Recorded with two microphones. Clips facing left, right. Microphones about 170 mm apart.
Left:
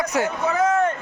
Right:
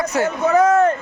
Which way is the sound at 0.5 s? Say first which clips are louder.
Right 6 dB; 40° right (ahead or behind).